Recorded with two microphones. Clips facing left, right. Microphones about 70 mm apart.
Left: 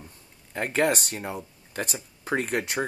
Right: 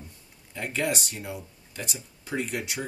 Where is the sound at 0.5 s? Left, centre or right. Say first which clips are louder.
Left 5 dB; left.